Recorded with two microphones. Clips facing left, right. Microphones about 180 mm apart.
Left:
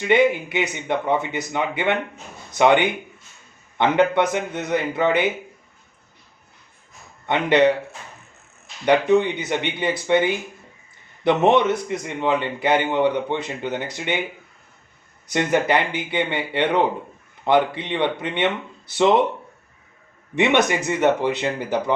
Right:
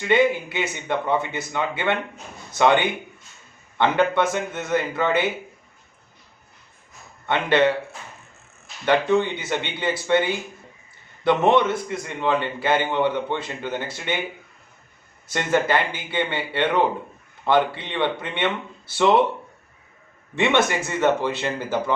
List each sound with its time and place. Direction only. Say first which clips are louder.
0.0 s a man's voice: left 2 dB; 20° left (ahead or behind)
7.3 s speech: left 2 dB; 20° left (ahead or behind)
8.8 s a man's voice: left 3 dB; 15° left (ahead or behind)
15.3 s a man's voice: left 2 dB; 15° left (ahead or behind)
20.3 s speech: left 2 dB; 20° left (ahead or behind)